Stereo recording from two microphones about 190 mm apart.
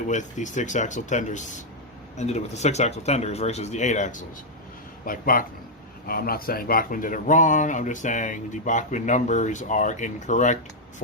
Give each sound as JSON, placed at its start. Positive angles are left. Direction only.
{"t": 0.1, "sound": "speech", "side_deg": 40}